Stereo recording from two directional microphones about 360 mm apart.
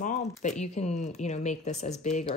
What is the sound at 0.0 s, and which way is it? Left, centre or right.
Speech, centre.